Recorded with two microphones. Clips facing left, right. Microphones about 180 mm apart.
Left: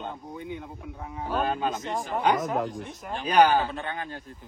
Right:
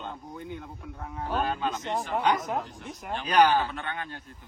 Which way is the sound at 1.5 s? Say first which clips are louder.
Left 2 dB; 45° left (ahead or behind).